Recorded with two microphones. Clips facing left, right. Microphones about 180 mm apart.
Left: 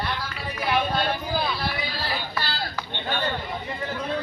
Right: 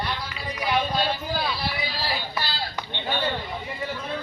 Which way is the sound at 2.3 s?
10° right (ahead or behind).